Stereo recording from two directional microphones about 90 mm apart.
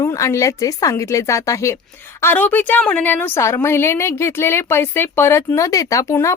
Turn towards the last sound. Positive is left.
turn(degrees=35)  # may be behind; listen again after turning